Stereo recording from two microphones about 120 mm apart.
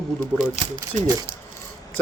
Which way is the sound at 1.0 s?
30° right (ahead or behind).